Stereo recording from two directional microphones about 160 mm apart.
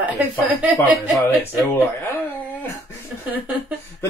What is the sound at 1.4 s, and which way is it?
Speech, 15° left (ahead or behind).